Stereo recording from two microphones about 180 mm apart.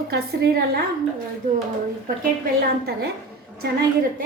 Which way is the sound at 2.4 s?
60° right (ahead or behind).